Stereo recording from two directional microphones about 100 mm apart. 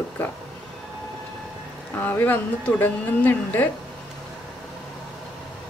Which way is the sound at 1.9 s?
20° left (ahead or behind).